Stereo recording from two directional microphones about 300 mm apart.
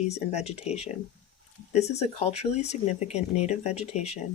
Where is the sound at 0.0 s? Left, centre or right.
Left.